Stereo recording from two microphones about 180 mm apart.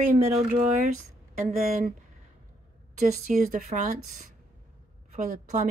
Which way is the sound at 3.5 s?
45° right (ahead or behind).